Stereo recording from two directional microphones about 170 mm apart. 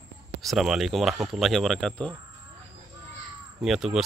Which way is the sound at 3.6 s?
Centre (ahead or behind).